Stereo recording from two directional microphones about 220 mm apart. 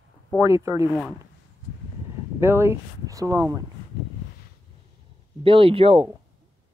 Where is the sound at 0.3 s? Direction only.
Centre (ahead or behind).